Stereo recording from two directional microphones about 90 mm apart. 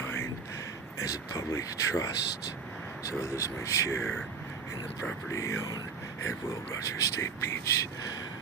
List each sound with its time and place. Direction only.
0.0 s a sound: 25° left (ahead or behind)
1.0 s speech: 35° left (ahead or behind)
5.3 s speech: 35° left (ahead or behind)